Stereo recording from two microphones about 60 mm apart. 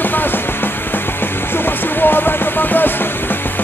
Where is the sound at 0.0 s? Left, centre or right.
Left.